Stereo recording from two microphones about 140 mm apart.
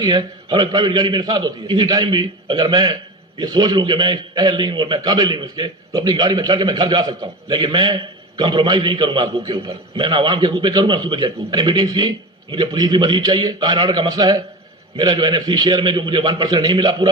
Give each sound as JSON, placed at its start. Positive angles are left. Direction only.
{"t": 0.0, "sound": "a man's voice", "side_deg": -30}